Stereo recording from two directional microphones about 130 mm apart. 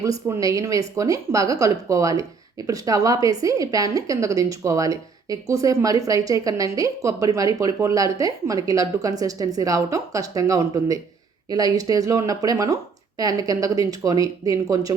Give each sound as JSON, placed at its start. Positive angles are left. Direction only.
{"t": 0.0, "sound": "a woman's voice", "side_deg": -25}